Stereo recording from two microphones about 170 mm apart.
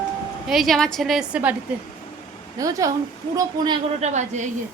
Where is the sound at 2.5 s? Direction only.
20° right (ahead or behind).